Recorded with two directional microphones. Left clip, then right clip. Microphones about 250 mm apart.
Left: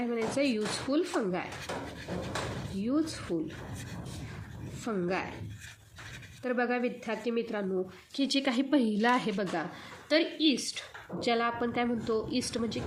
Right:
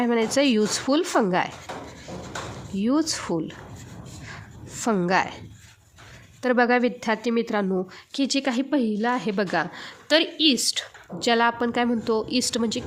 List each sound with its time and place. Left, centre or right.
0.0 s a woman's voice: right
2.8 s a woman's voice: right
4.8 s a woman's voice: right
6.4 s a woman's voice: right
8.2 s speech: right
9.3 s a woman's voice: right